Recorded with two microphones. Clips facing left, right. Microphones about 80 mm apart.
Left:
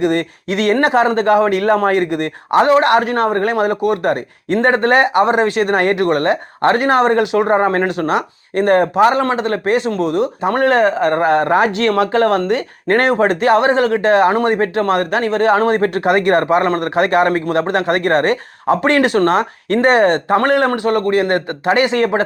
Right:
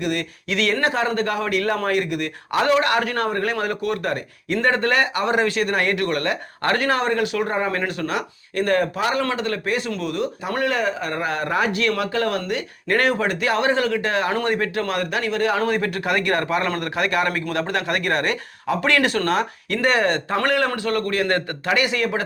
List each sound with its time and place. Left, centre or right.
0.0 s speech: left
8.0 s speech: left
10.5 s speech: left
14.6 s speech: left